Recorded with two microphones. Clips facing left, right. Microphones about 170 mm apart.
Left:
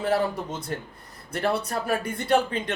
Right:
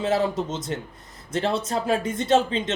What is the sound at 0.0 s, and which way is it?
Speech, 20° right (ahead or behind).